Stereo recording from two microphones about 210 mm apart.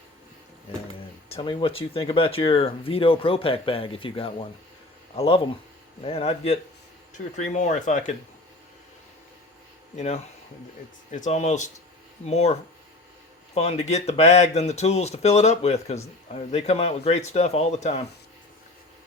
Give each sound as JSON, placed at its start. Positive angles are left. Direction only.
{"t": 1.3, "sound": "speech", "side_deg": 25}
{"t": 9.9, "sound": "speech", "side_deg": 35}